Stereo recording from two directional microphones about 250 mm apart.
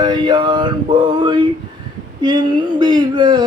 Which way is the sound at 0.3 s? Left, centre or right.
Centre.